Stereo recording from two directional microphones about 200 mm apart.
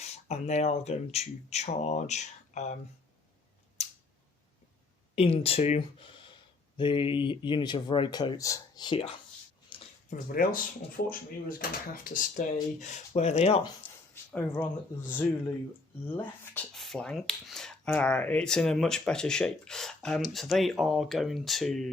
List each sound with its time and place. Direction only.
0.0 s speech: 35° left (ahead or behind)
5.1 s speech: 30° left (ahead or behind)
9.6 s a sound: 25° left (ahead or behind)
10.2 s speech: 45° left (ahead or behind)
13.8 s a sound: 5° left (ahead or behind)
14.3 s speech: 10° left (ahead or behind)